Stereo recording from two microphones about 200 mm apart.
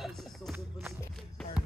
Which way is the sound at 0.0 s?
Centre (ahead or behind).